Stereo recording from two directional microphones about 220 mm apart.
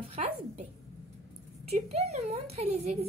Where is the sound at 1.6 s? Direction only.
30° right (ahead or behind).